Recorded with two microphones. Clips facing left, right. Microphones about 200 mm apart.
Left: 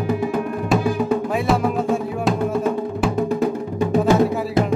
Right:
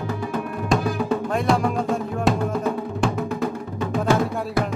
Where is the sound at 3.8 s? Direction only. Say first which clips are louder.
Left 5 dB; 15° left (ahead or behind).